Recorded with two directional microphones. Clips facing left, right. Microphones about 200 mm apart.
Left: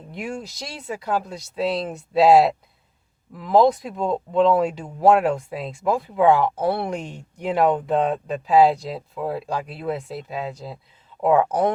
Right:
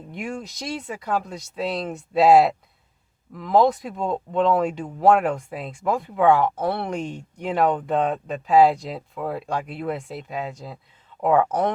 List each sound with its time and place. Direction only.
0.1 s speech: centre (ahead or behind)